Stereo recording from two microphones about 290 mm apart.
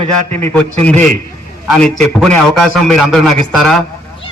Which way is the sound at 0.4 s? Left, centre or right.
Centre.